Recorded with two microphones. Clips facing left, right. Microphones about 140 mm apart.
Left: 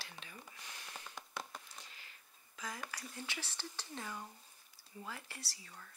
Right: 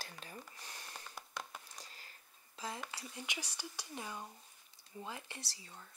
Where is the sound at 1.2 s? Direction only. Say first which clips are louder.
Even; 5° right (ahead or behind).